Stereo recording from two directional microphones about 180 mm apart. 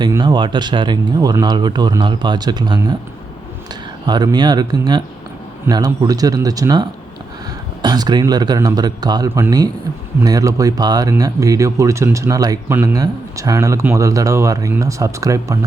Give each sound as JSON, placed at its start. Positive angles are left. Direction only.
{"t": 0.0, "sound": "speech", "side_deg": -25}
{"t": 4.0, "sound": "speech", "side_deg": -20}